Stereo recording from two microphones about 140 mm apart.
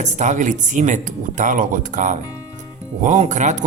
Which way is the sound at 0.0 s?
60° right (ahead or behind).